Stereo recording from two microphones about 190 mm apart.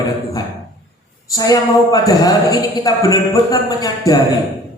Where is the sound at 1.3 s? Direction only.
20° left (ahead or behind).